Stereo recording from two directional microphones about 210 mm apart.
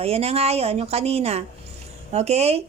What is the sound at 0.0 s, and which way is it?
A woman's voice, 30° right (ahead or behind).